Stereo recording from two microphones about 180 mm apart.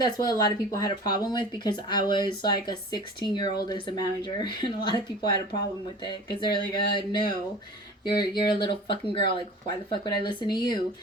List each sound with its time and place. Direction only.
0.0 s speech: 20° left (ahead or behind)
6.4 s speech: 25° left (ahead or behind)